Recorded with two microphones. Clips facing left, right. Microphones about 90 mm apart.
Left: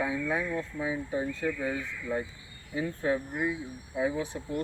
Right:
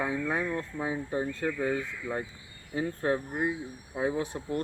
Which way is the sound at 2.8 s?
40° right (ahead or behind).